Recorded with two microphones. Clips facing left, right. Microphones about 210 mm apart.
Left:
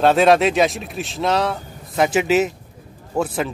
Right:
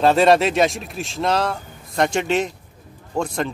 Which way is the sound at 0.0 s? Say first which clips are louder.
Left 1 dB; centre (ahead or behind).